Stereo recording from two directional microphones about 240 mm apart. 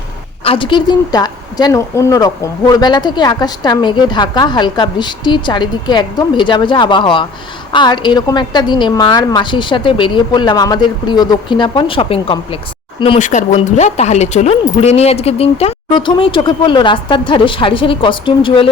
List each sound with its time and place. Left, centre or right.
0.4 s a woman's voice: left